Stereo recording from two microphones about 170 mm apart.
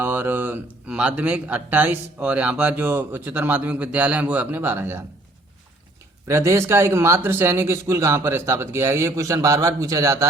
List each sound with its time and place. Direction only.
0.0 s speech: 10° right (ahead or behind)
6.2 s speech: 15° right (ahead or behind)